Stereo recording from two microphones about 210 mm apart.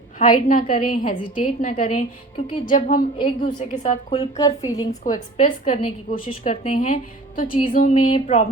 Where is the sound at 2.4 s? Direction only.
25° left (ahead or behind).